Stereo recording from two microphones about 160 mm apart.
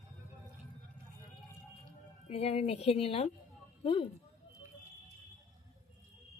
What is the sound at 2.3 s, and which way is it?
Speech, 40° left (ahead or behind).